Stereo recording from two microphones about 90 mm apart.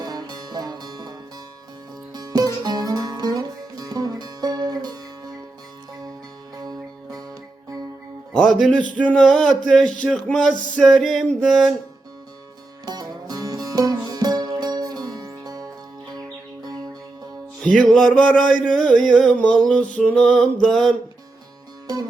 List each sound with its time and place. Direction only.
0.0 s music: 45° right (ahead or behind)
2.1 s music: 45° right (ahead or behind)
6.6 s music: 45° right (ahead or behind)
8.3 s music: 5° left (ahead or behind)
9.0 s a sound: 10° left (ahead or behind)
12.8 s music: 50° right (ahead or behind)
17.6 s a sound: centre (ahead or behind)